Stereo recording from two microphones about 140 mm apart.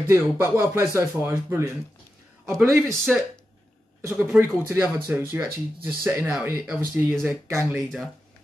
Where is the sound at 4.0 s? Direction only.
15° right (ahead or behind).